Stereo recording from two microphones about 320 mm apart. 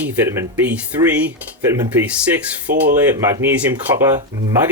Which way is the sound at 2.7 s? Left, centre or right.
Right.